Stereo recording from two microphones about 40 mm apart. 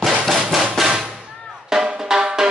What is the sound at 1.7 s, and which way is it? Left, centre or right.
Drum, centre.